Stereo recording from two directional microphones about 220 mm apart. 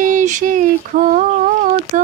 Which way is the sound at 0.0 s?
35° right (ahead or behind).